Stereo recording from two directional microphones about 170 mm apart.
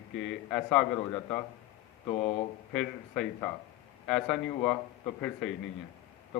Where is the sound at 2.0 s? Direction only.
30° left (ahead or behind).